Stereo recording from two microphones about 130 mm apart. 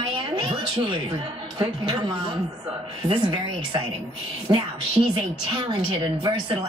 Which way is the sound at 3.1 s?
35° right (ahead or behind).